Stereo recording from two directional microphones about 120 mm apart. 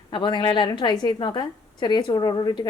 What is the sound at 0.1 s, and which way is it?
A woman's voice, 40° left (ahead or behind).